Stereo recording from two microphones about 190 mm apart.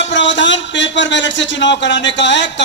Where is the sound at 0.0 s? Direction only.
70° left (ahead or behind).